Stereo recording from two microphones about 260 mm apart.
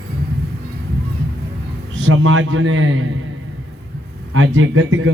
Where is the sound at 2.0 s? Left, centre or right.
Right.